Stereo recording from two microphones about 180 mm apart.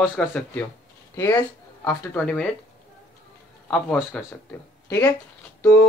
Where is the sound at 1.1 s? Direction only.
15° left (ahead or behind).